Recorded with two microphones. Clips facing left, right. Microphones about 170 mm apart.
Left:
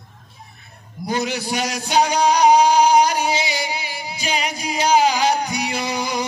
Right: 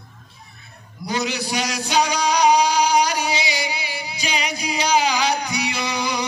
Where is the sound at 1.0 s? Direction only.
50° left (ahead or behind).